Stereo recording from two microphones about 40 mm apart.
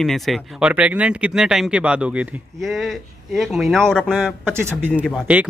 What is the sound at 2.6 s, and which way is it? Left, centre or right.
Speech, centre.